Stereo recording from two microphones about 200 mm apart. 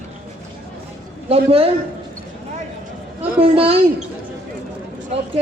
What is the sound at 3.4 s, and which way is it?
Speech, 30° right (ahead or behind).